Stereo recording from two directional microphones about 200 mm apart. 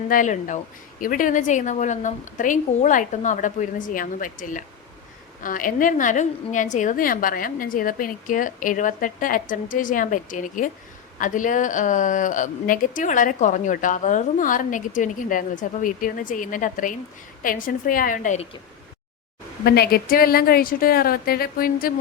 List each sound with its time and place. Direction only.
0.1 s a woman's voice: 40° left (ahead or behind)
19.6 s a woman's voice: 50° left (ahead or behind)